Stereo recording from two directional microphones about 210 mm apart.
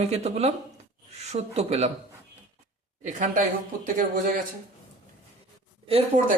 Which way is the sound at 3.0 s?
35° right (ahead or behind).